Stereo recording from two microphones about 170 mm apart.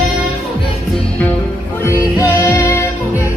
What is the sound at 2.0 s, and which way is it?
Music, 15° left (ahead or behind).